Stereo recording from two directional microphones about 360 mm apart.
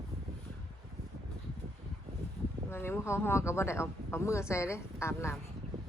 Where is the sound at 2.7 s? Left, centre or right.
Centre.